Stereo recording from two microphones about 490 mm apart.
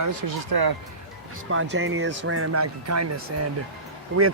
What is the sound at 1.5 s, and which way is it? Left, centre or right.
Speech, right.